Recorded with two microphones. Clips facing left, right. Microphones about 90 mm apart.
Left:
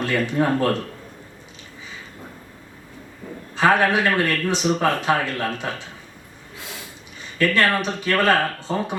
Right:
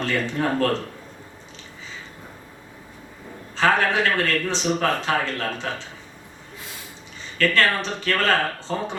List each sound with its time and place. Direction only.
0.0 s a man's voice: 15° left (ahead or behind)
3.5 s a man's voice: 15° left (ahead or behind)
7.3 s a man's voice: 15° left (ahead or behind)